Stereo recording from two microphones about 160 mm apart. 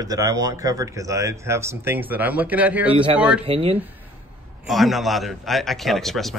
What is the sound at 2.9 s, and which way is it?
Speech, 30° right (ahead or behind).